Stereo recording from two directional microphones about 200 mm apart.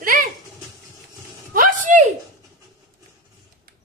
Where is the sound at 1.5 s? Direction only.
40° right (ahead or behind).